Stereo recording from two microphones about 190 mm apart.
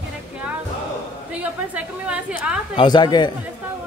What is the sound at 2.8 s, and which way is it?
Speech, 25° left (ahead or behind).